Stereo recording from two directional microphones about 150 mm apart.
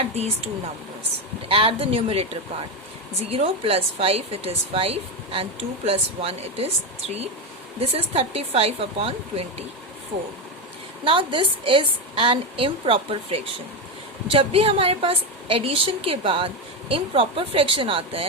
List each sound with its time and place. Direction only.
0.0 s speech: 45° right (ahead or behind)
1.5 s speech: 40° right (ahead or behind)
7.8 s speech: 40° right (ahead or behind)
11.0 s speech: 35° right (ahead or behind)